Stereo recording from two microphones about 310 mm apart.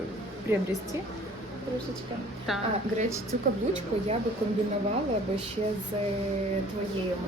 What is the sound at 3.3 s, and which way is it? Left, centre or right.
Speech, right.